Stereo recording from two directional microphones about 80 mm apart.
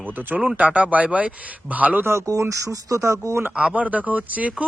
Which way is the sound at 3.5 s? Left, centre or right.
Centre.